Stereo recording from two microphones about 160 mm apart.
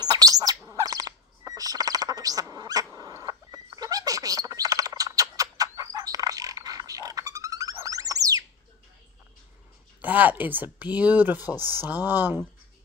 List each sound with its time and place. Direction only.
0.0 s bird: 25° right (ahead or behind)
10.0 s speech: 10° right (ahead or behind)